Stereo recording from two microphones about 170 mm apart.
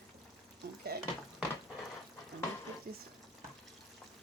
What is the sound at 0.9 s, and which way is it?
Speech, 65° right (ahead or behind).